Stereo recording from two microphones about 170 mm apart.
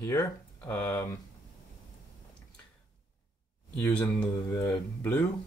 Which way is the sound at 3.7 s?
10° left (ahead or behind).